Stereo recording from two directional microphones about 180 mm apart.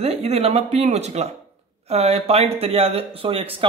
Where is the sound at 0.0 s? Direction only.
35° right (ahead or behind).